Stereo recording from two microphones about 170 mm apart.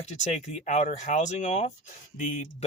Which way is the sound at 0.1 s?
45° left (ahead or behind).